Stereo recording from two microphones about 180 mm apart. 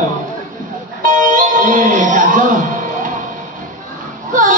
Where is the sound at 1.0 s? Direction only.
45° right (ahead or behind).